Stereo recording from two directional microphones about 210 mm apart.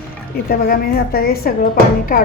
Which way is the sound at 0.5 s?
45° left (ahead or behind).